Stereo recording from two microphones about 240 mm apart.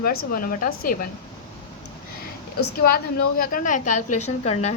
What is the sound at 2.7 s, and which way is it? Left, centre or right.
A woman's voice, left.